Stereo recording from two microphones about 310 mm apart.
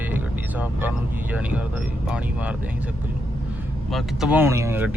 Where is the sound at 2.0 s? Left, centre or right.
Centre.